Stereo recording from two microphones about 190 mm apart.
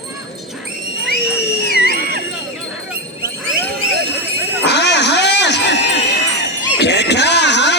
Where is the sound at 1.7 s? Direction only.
55° left (ahead or behind).